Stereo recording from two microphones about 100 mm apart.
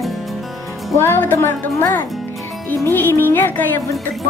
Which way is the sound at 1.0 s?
20° left (ahead or behind).